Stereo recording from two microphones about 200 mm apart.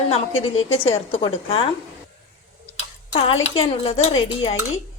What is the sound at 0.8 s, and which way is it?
Speech, 30° left (ahead or behind).